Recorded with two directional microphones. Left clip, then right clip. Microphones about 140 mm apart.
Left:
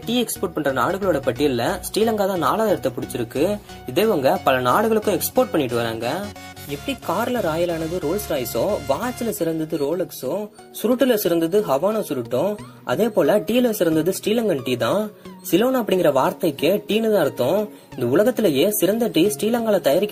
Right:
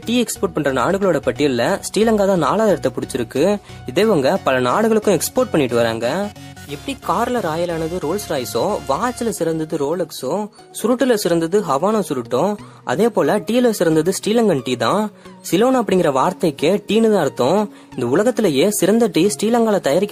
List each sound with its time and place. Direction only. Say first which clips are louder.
0.0 s speech: right 3 dB; 30° right (ahead or behind)